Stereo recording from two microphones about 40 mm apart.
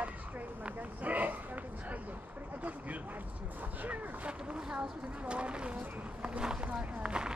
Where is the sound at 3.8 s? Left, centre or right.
Right.